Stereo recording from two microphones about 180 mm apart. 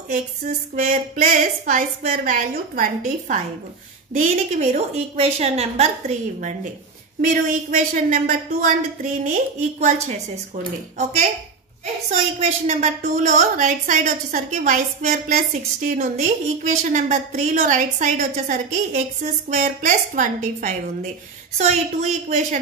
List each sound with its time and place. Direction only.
0.1 s a woman's voice: 45° right (ahead or behind)